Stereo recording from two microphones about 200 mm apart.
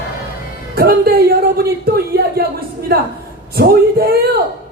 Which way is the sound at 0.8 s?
50° right (ahead or behind).